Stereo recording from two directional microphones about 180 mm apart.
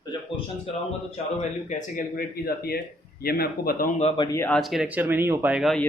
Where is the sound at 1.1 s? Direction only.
40° left (ahead or behind).